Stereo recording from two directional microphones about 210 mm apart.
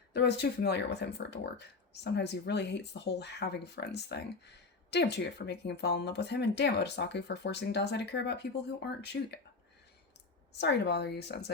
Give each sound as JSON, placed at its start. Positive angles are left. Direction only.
{"t": 0.1, "sound": "speech", "side_deg": 55}
{"t": 10.5, "sound": "speech", "side_deg": 55}